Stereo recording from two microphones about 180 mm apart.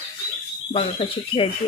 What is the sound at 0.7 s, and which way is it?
Speech, 30° left (ahead or behind).